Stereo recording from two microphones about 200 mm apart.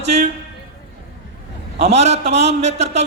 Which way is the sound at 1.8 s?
35° right (ahead or behind).